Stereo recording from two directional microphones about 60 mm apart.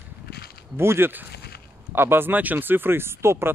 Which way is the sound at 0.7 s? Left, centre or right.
Right.